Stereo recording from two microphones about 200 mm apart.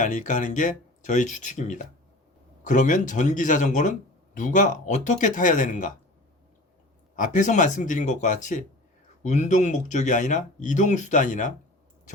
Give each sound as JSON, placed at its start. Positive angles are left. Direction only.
{"t": 0.0, "sound": "speech", "side_deg": 40}
{"t": 7.2, "sound": "speech", "side_deg": 40}